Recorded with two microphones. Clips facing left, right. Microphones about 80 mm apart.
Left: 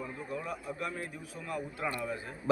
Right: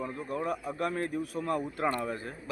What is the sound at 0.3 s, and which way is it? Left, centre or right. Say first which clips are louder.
A man's voice: right 6 dB; right.